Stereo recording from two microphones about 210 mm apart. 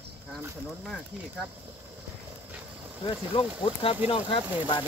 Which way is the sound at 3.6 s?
25° left (ahead or behind).